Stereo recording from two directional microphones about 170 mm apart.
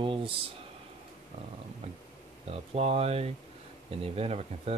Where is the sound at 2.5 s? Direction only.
35° right (ahead or behind).